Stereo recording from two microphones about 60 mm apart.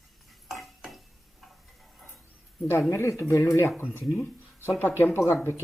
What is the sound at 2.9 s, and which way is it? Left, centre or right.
Speech, left.